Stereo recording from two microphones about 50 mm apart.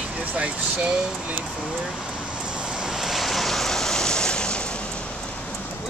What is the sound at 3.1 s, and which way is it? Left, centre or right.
Vehicle, centre.